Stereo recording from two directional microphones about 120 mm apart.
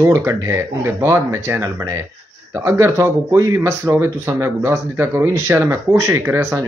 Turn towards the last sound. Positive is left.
turn(degrees=-25)  # may be behind; listen again after turning